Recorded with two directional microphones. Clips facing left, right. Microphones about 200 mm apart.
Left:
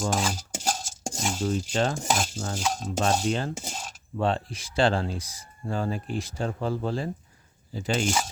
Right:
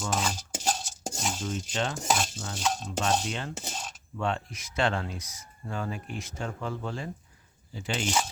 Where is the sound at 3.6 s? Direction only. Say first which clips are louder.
Left 1 dB; 5° left (ahead or behind).